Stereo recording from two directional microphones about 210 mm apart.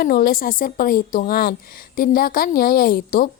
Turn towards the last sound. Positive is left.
turn(degrees=45)  # may be behind; listen again after turning